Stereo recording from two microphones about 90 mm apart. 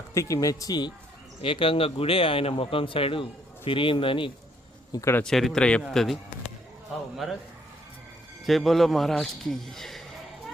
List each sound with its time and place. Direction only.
0.1 s speech: 35° left (ahead or behind)
1.4 s speech: 80° left
4.9 s speech: 35° left (ahead or behind)
5.2 s a man's voice: centre (ahead or behind)
7.2 s a man's voice: centre (ahead or behind)
8.4 s a man's voice: centre (ahead or behind)